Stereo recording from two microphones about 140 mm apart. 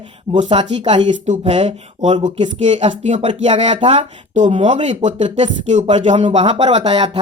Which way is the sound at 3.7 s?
40° right (ahead or behind).